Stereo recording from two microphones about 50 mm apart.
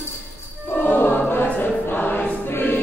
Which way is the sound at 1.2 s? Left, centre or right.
Left.